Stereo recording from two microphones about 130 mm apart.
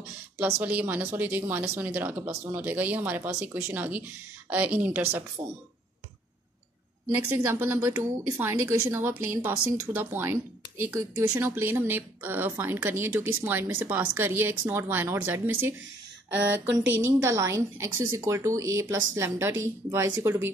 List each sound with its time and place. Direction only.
0.4 s speech: 15° right (ahead or behind)
7.2 s speech: 15° right (ahead or behind)
16.7 s a woman's voice: 25° right (ahead or behind)